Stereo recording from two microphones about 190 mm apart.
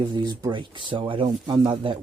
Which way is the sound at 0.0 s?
20° right (ahead or behind).